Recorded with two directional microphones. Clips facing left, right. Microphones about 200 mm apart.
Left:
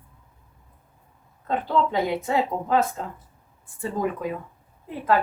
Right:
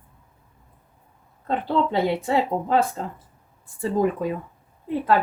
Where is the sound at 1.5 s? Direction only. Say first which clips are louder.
Right 1 dB; 30° right (ahead or behind).